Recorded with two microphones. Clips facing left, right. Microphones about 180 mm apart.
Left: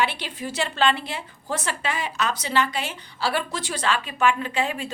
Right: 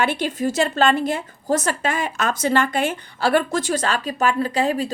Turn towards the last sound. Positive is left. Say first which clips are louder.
# right 6 dB
turn(degrees=-40)  # may be behind; listen again after turning